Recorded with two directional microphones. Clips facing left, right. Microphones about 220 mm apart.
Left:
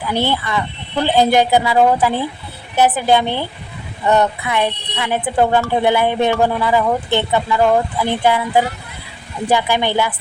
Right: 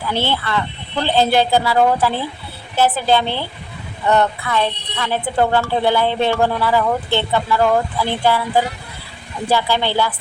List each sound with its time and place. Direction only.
0.1 s speech: 15° left (ahead or behind)